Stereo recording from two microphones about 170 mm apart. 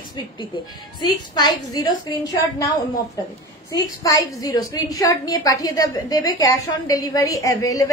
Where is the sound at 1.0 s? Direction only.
25° left (ahead or behind).